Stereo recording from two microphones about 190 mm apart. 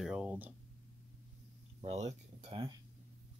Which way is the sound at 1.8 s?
35° right (ahead or behind).